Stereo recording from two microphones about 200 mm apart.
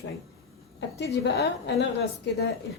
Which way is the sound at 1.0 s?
60° left (ahead or behind).